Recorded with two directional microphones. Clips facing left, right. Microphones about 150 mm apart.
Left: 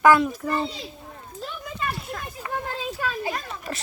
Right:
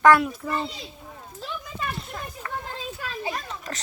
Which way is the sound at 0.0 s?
Centre (ahead or behind).